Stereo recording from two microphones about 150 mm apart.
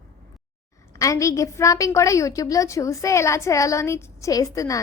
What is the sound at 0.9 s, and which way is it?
A woman's voice, 20° left (ahead or behind).